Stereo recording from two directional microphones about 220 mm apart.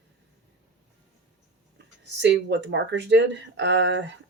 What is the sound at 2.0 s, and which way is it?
Speech, 50° right (ahead or behind).